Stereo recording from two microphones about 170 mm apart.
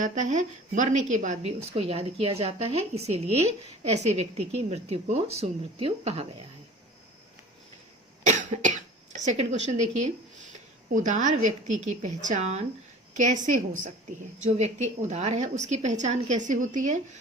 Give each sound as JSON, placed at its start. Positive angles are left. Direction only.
{"t": 0.0, "sound": "a woman's voice", "side_deg": -50}
{"t": 8.2, "sound": "a woman's voice", "side_deg": -45}